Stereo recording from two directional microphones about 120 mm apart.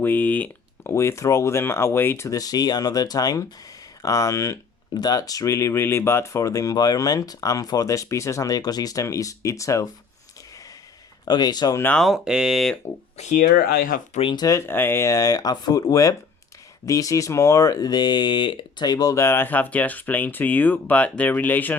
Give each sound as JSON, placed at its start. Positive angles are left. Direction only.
{"t": 0.0, "sound": "speech", "side_deg": 15}
{"t": 11.3, "sound": "speech", "side_deg": 35}
{"t": 11.9, "sound": "speech", "side_deg": 0}
{"t": 13.1, "sound": "speech", "side_deg": 75}
{"t": 14.2, "sound": "speech", "side_deg": 45}
{"t": 14.4, "sound": "speech", "side_deg": 20}